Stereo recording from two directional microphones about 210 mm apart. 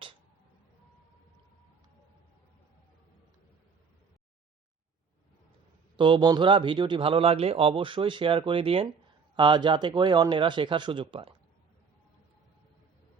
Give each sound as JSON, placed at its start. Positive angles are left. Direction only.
{"t": 6.0, "sound": "a man's voice", "side_deg": -20}